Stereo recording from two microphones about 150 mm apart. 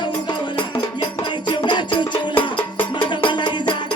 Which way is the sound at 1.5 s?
30° left (ahead or behind).